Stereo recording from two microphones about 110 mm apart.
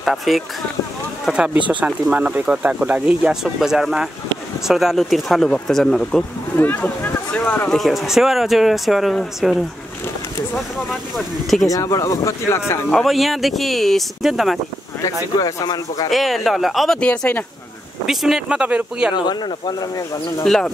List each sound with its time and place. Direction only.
0.0 s speech: centre (ahead or behind)
6.5 s speech: 15° left (ahead or behind)
7.7 s speech: centre (ahead or behind)
11.7 s speech: 30° left (ahead or behind)
12.9 s speech: centre (ahead or behind)
15.3 s speech: 35° left (ahead or behind)
16.1 s speech: centre (ahead or behind)
18.0 s speech: 5° right (ahead or behind)
19.1 s speech: 40° left (ahead or behind)
20.4 s speech: 5° left (ahead or behind)